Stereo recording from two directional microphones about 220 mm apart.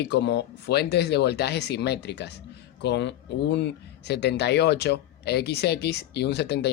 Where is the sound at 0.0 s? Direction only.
50° left (ahead or behind).